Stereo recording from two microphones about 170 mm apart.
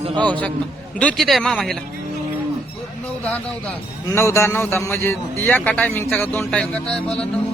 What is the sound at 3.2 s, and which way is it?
A man's voice, 10° left (ahead or behind).